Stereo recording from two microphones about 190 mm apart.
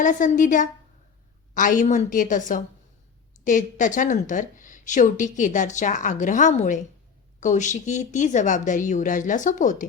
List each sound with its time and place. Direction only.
0.0 s speech: 40° left (ahead or behind)